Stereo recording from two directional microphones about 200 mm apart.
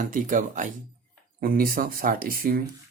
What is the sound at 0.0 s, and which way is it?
Speech, 40° right (ahead or behind).